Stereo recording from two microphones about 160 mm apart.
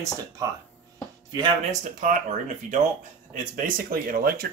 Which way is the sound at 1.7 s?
50° right (ahead or behind).